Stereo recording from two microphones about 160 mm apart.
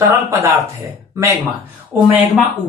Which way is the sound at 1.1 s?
15° right (ahead or behind).